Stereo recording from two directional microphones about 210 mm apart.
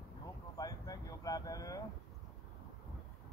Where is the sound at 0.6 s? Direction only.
15° left (ahead or behind).